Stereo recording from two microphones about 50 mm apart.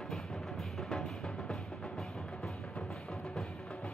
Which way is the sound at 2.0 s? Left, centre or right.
Centre.